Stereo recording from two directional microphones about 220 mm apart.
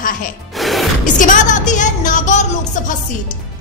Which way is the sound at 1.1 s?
35° left (ahead or behind).